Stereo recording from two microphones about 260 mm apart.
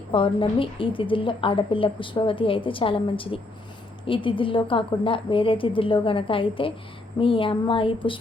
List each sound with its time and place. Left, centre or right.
0.1 s a woman's voice: centre